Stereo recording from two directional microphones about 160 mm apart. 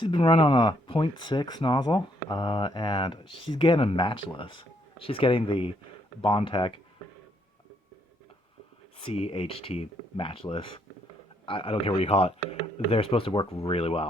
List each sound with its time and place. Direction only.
0.0 s speech: 30° left (ahead or behind)
9.0 s speech: 35° left (ahead or behind)